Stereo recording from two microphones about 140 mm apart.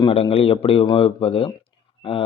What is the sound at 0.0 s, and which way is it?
Speech, 45° left (ahead or behind).